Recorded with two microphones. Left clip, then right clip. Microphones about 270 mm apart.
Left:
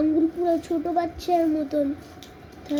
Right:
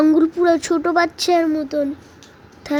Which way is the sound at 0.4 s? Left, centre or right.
Right.